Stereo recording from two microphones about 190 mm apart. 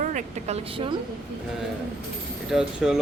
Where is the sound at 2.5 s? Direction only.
5° right (ahead or behind).